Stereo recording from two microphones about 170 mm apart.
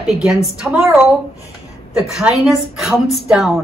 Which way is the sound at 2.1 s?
Centre (ahead or behind).